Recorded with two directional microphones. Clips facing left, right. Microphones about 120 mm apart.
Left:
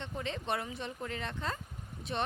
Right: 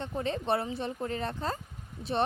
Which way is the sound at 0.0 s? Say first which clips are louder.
Right 6 dB; 40° right (ahead or behind).